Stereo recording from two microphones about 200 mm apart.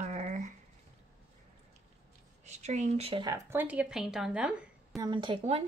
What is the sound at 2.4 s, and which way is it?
Speech, 35° right (ahead or behind).